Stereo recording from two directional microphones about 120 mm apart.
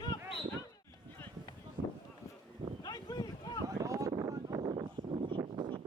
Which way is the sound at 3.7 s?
30° right (ahead or behind).